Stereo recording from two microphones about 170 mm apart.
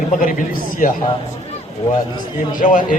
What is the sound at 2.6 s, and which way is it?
Speech, 50° left (ahead or behind).